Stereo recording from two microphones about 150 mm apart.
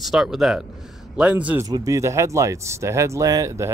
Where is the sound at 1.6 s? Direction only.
25° right (ahead or behind).